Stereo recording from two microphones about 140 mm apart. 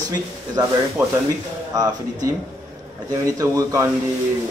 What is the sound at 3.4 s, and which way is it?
Speech, 25° right (ahead or behind).